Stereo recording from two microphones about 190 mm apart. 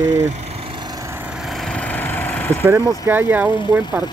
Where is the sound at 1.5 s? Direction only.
5° left (ahead or behind).